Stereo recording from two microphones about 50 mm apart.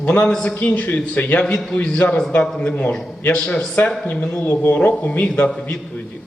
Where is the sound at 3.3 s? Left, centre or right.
Centre.